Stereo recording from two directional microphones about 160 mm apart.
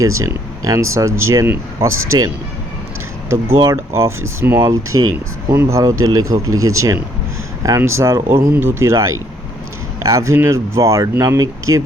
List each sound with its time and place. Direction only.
0.0 s speech: 20° right (ahead or behind)